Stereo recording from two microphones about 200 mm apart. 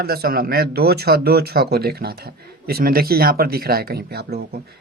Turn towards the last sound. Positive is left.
turn(degrees=-50)  # may be behind; listen again after turning